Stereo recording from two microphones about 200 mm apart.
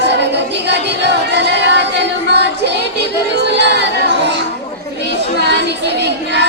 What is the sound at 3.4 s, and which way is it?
Chatter, 60° right (ahead or behind).